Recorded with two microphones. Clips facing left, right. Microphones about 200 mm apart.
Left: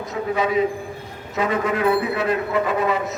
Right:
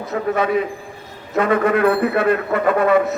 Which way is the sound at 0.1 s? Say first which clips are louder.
Right 3 dB; 60° right (ahead or behind).